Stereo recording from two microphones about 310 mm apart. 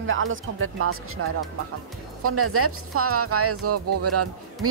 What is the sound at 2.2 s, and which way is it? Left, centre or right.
Speech, right.